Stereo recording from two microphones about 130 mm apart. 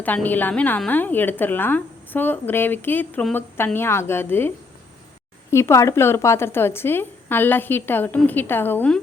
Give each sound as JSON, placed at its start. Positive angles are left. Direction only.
{"t": 0.0, "sound": "a woman's voice", "side_deg": 15}